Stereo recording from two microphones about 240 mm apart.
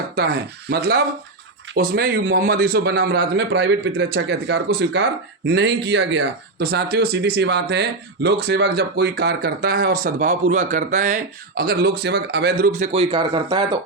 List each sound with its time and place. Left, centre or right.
0.2 s speech: right; by 13.7 s centre